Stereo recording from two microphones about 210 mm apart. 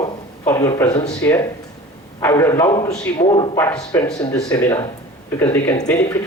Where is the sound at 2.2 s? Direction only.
15° left (ahead or behind).